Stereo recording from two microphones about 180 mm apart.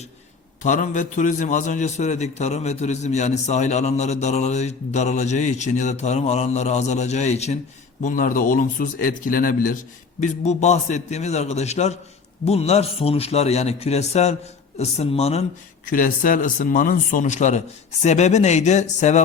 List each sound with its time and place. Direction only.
0.6 s a man's voice: 45° left (ahead or behind)
8.0 s a man's voice: 50° left (ahead or behind)
15.9 s a man's voice: 50° left (ahead or behind)